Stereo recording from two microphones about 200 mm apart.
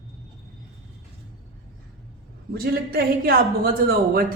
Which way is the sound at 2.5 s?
50° right (ahead or behind).